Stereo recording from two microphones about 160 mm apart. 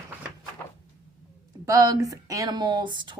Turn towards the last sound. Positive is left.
turn(degrees=-30)  # may be behind; listen again after turning